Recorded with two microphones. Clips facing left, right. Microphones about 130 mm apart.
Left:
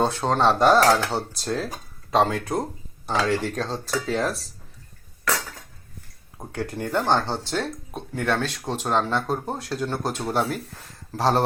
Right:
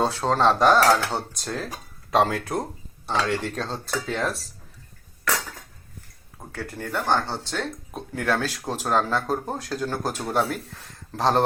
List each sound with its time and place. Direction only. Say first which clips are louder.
0.0 s speech: even; centre (ahead or behind)
6.5 s speech: left 4 dB; 20° left (ahead or behind)
7.9 s speech: even; centre (ahead or behind)